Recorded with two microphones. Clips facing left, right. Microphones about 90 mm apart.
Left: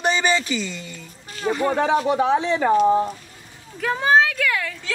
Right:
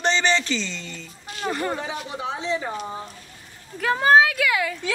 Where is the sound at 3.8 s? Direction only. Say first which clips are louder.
Right 1 dB; centre (ahead or behind).